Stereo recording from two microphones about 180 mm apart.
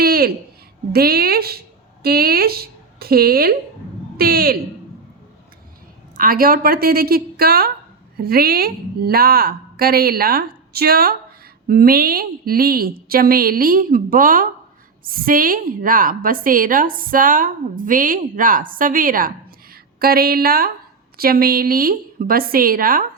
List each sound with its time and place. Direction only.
0.0 s a sound: 55° right (ahead or behind)
0.9 s a woman's voice: 60° right (ahead or behind)
6.1 s a woman's voice: 55° right (ahead or behind)